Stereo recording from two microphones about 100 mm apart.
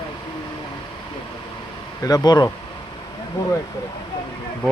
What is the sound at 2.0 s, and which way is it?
Speech, 40° left (ahead or behind).